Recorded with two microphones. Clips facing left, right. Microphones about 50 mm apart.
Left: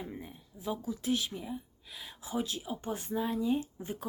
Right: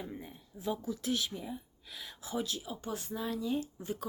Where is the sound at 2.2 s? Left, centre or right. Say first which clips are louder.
Left 1 dB; left.